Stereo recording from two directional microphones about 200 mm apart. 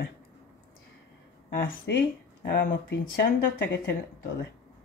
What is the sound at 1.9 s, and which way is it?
Speech, 60° left (ahead or behind).